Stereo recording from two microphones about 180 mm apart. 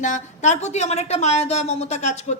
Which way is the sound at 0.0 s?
40° left (ahead or behind).